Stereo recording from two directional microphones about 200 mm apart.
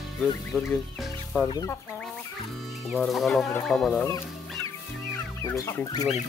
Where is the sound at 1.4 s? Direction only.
20° left (ahead or behind).